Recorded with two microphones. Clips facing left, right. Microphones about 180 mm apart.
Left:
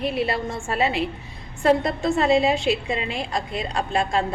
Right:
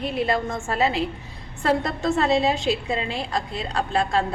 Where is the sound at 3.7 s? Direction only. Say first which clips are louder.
Right 1 dB; 35° right (ahead or behind).